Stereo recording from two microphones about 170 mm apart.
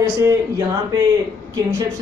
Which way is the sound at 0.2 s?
20° right (ahead or behind).